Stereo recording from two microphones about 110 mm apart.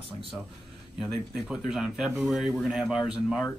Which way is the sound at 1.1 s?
Centre (ahead or behind).